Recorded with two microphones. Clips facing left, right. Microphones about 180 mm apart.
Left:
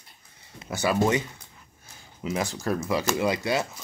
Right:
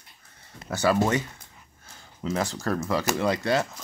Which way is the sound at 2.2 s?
15° left (ahead or behind).